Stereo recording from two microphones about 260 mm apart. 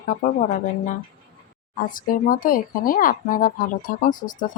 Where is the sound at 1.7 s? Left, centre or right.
Left.